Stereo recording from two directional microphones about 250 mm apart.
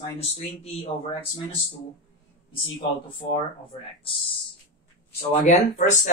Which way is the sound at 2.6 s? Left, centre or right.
Left.